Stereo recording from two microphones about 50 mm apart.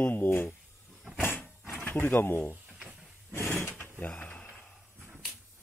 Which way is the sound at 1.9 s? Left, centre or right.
Left.